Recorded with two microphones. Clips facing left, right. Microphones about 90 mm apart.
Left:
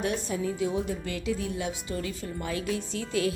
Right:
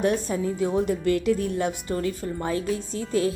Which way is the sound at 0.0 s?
45° right (ahead or behind).